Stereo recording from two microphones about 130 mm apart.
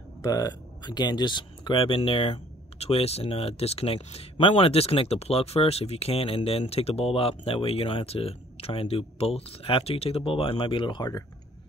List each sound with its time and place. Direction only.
0.2 s speech: 30° left (ahead or behind)